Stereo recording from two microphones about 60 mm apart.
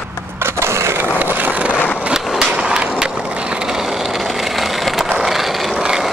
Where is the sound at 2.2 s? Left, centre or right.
Centre.